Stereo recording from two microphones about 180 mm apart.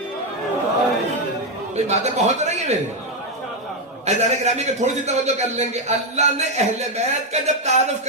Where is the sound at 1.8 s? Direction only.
40° right (ahead or behind).